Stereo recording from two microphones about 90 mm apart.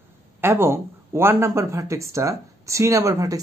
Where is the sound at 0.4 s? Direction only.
25° right (ahead or behind).